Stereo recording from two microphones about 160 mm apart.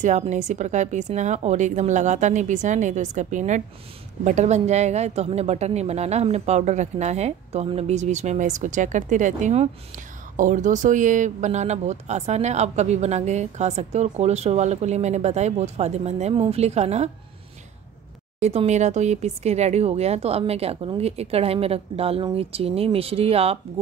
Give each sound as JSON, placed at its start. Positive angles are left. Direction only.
{"t": 0.0, "sound": "a woman's voice", "side_deg": -50}
{"t": 18.4, "sound": "speech", "side_deg": -40}